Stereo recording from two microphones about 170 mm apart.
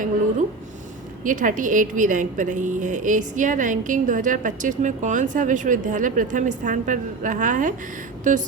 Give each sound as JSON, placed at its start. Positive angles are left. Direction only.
{"t": 1.2, "sound": "a woman's voice", "side_deg": -50}